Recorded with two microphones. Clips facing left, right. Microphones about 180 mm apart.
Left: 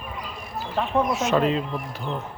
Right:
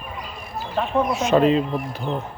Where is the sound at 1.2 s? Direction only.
20° right (ahead or behind).